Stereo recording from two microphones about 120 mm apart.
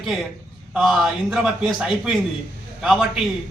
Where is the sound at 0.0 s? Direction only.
5° right (ahead or behind).